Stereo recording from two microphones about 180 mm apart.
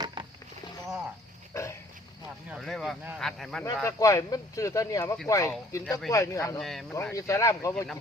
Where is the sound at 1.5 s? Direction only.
15° left (ahead or behind).